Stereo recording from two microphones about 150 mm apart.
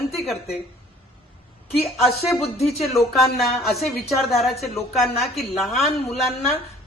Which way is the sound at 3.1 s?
Centre (ahead or behind).